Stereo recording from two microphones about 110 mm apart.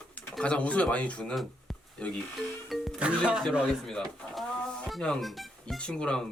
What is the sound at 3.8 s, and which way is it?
Speech, 5° left (ahead or behind).